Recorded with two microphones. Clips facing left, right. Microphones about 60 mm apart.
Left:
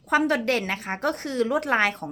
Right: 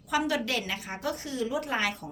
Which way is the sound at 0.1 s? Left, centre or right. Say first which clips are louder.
Left 6 dB; left.